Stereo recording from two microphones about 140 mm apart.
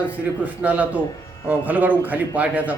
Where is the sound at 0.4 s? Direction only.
10° right (ahead or behind).